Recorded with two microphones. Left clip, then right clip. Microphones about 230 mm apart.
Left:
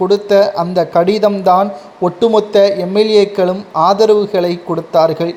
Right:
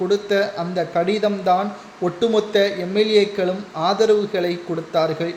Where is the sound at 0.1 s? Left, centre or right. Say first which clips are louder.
Left 9 dB; left.